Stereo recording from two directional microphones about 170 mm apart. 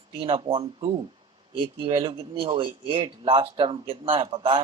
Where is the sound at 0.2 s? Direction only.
30° right (ahead or behind).